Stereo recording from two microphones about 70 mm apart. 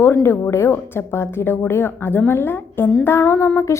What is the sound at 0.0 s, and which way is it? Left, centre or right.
Speech, left.